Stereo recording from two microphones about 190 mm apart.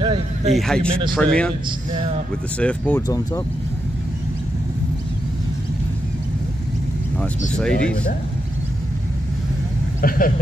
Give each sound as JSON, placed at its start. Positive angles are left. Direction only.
{"t": 0.0, "sound": "a sound", "side_deg": -25}
{"t": 0.6, "sound": "speech", "side_deg": 0}
{"t": 2.6, "sound": "speech", "side_deg": 10}
{"t": 7.5, "sound": "speech", "side_deg": 5}
{"t": 10.0, "sound": "speech", "side_deg": 45}